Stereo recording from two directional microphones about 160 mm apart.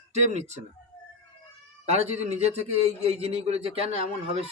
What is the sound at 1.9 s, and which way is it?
A man's voice, 40° right (ahead or behind).